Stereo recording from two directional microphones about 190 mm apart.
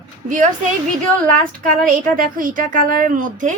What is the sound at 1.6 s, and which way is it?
Speech, 45° right (ahead or behind).